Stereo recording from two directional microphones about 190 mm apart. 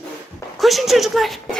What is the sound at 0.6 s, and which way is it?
Speech, centre (ahead or behind).